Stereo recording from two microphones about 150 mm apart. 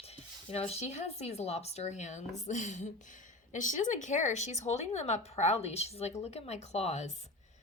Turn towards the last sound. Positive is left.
turn(degrees=45)  # may be behind; listen again after turning